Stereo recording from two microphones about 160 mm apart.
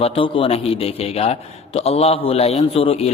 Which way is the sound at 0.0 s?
35° left (ahead or behind).